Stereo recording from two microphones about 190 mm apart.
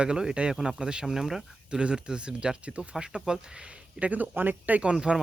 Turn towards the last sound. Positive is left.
turn(degrees=-5)  # may be behind; listen again after turning